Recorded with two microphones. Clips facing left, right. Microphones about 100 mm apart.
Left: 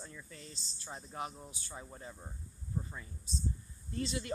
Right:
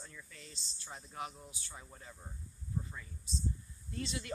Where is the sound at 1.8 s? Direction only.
25° left (ahead or behind).